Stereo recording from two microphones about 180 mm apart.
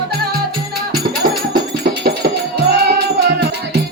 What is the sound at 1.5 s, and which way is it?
Music, 65° right (ahead or behind).